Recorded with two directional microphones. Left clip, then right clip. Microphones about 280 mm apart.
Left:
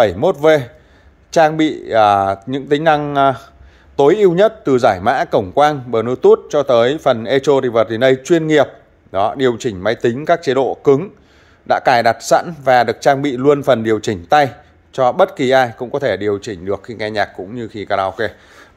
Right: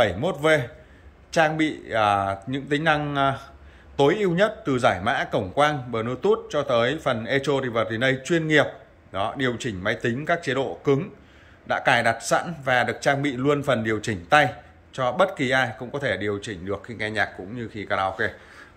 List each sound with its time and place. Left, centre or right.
0.0 s speech: centre